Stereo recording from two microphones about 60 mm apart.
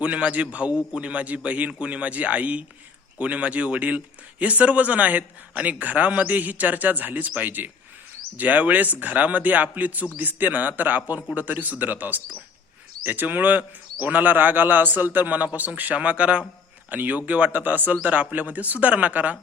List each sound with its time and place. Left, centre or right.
0.0 s a man's voice: right